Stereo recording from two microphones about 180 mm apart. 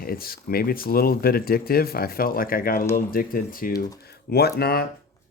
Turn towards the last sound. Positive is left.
turn(degrees=60)  # may be behind; listen again after turning